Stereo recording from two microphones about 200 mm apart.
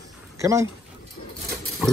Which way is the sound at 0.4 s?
15° right (ahead or behind).